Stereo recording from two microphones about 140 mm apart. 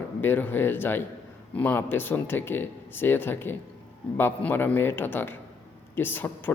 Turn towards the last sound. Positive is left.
turn(degrees=15)  # may be behind; listen again after turning